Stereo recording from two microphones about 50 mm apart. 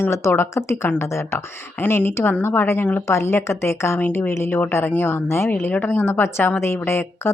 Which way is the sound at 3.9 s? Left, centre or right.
Left.